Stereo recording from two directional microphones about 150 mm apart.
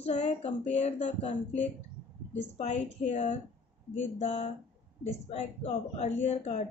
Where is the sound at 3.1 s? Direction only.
55° left (ahead or behind).